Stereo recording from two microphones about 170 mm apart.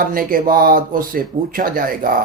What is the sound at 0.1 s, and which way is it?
Speech, 55° right (ahead or behind).